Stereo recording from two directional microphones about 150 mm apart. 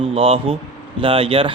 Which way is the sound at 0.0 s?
40° right (ahead or behind).